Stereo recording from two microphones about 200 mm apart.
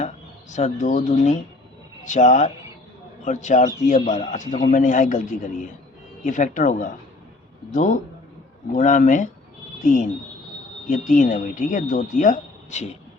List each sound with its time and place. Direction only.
0.5 s speech: 40° left (ahead or behind)